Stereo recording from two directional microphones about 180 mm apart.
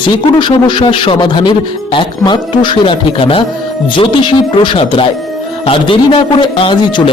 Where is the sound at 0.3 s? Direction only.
25° left (ahead or behind).